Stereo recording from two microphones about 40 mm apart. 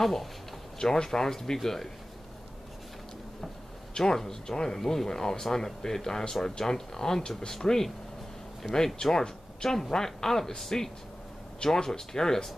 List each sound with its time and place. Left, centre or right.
0.0 s speech: centre
0.7 s speech: centre
3.9 s speech: centre